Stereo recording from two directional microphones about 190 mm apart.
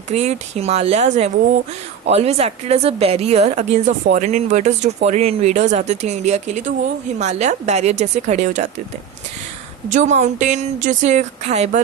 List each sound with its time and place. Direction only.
0.1 s a woman's voice: 35° right (ahead or behind)
9.9 s a woman's voice: 40° right (ahead or behind)